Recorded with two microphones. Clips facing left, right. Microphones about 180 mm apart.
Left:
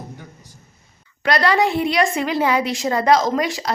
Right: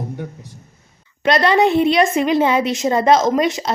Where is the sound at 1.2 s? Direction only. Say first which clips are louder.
Right 3 dB; 20° right (ahead or behind).